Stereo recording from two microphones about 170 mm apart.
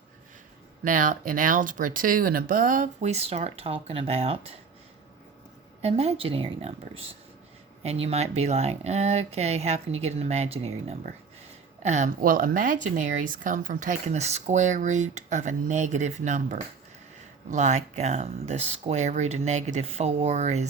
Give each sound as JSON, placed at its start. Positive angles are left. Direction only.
{"t": 0.9, "sound": "speech", "side_deg": -50}
{"t": 5.8, "sound": "speech", "side_deg": -35}